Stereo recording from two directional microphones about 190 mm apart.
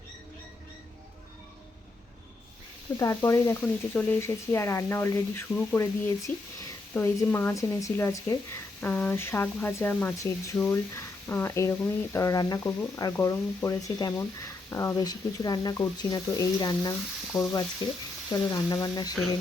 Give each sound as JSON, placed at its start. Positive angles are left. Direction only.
{"t": 3.0, "sound": "speech", "side_deg": 15}